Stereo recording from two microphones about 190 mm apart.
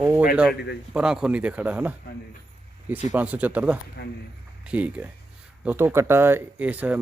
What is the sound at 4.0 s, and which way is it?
Speech, 60° left (ahead or behind).